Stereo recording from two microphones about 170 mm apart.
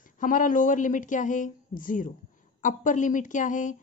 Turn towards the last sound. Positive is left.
turn(degrees=50)  # may be behind; listen again after turning